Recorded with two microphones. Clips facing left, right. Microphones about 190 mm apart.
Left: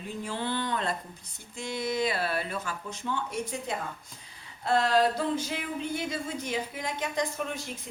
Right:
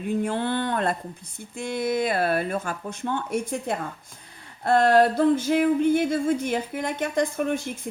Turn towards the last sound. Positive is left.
turn(degrees=-55)  # may be behind; listen again after turning